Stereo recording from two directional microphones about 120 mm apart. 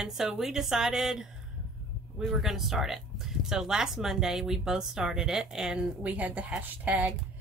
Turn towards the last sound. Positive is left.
turn(degrees=-10)  # may be behind; listen again after turning